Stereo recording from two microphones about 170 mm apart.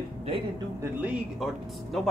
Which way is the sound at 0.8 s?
10° right (ahead or behind).